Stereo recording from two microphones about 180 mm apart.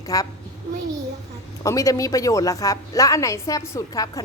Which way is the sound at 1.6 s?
20° left (ahead or behind).